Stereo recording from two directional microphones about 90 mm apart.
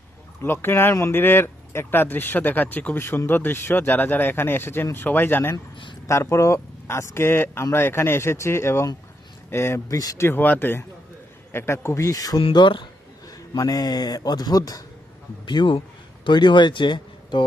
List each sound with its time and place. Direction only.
0.4 s speech: 25° left (ahead or behind)
10.0 s speech: 40° left (ahead or behind)
10.2 s speech: 20° left (ahead or behind); by 12.4 s 40° left (ahead or behind)
12.5 s speech: 60° left (ahead or behind)
13.2 s speech: 45° left (ahead or behind)
15.4 s speech: 60° left (ahead or behind)